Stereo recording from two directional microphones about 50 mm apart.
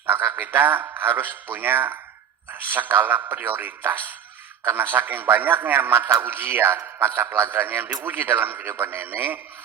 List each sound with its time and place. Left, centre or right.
0.0 s a sound: right
0.3 s speech: right
7.5 s speech: right
8.6 s speech: right